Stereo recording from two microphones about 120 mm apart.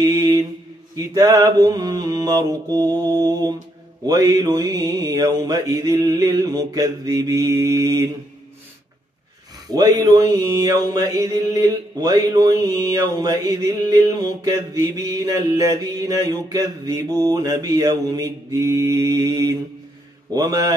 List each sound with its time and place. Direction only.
0.0 s mantra: 30° right (ahead or behind)
9.7 s mantra: 30° right (ahead or behind)